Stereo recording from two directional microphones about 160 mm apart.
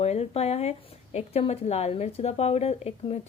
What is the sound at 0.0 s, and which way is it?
A woman's voice, 40° left (ahead or behind).